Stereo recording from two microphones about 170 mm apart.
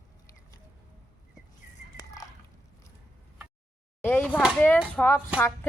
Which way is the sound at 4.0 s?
10° left (ahead or behind).